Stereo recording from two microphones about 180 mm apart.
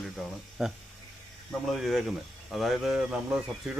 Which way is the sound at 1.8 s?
Centre (ahead or behind).